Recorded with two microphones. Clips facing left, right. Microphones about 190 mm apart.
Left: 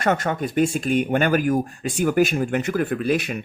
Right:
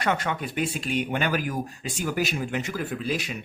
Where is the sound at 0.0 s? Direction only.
45° left (ahead or behind).